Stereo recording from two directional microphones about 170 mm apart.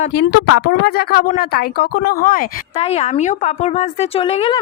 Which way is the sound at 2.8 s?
40° left (ahead or behind).